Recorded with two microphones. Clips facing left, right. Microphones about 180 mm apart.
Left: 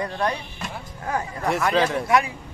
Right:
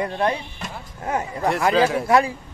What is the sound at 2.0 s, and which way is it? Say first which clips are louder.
Speech: right 3 dB; 35° right (ahead or behind).